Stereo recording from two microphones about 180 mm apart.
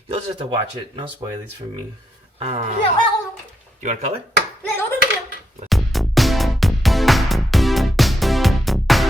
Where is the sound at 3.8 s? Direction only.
40° right (ahead or behind).